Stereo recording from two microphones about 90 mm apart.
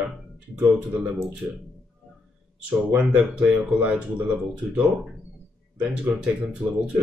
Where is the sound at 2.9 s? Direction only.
15° right (ahead or behind).